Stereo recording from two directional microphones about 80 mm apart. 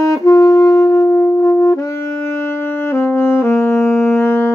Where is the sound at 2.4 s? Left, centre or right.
Left.